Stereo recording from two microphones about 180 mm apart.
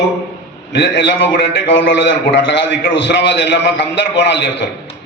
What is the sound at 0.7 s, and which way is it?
A man's voice, 70° left (ahead or behind).